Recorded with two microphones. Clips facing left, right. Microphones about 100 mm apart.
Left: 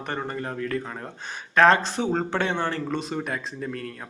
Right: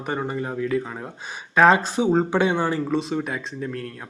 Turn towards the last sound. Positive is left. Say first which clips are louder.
# right 2 dB
turn(degrees=0)  # may be behind; listen again after turning